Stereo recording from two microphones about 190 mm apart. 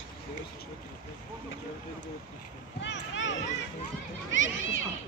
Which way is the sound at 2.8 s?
70° left (ahead or behind).